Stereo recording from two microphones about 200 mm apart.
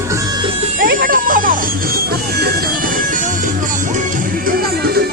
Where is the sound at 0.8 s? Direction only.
45° right (ahead or behind).